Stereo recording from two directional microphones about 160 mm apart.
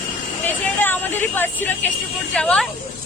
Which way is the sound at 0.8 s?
10° left (ahead or behind).